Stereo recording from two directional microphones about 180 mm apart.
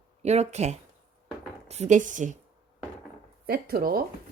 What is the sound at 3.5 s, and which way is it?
Speech, 55° right (ahead or behind).